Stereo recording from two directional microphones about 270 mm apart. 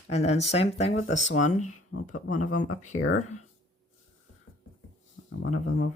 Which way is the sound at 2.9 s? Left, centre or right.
Left.